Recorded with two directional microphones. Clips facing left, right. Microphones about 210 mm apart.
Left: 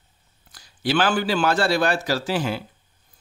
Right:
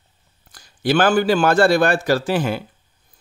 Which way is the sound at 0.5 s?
50° right (ahead or behind).